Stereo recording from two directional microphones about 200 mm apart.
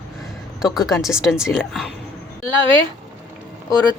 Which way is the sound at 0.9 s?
Centre (ahead or behind).